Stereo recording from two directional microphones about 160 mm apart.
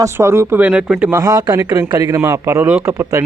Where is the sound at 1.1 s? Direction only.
20° right (ahead or behind).